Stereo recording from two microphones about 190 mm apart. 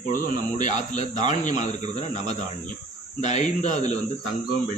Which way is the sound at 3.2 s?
40° left (ahead or behind).